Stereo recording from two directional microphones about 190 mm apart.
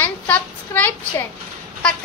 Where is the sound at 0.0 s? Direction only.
10° left (ahead or behind).